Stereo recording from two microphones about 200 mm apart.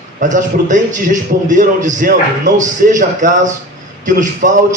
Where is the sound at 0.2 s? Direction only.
40° right (ahead or behind).